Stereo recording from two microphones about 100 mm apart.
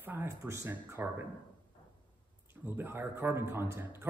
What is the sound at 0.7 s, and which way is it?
Speech, 20° right (ahead or behind).